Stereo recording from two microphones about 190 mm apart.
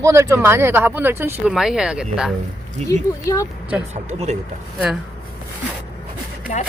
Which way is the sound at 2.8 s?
15° left (ahead or behind).